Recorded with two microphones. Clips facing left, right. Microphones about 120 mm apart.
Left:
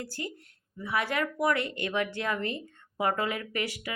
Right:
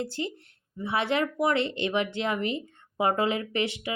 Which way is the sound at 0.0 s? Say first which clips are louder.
Right 6 dB; 25° right (ahead or behind).